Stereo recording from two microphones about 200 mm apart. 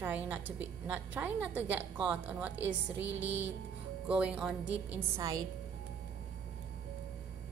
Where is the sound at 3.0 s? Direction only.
65° right (ahead or behind).